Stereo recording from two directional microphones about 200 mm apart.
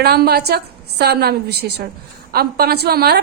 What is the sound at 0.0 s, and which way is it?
A woman's voice, 50° right (ahead or behind).